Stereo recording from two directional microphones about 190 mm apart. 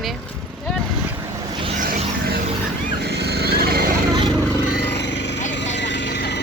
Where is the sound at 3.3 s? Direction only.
55° right (ahead or behind).